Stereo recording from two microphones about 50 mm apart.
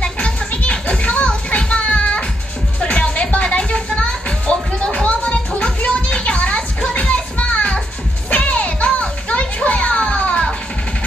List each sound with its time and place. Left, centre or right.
0.0 s music: left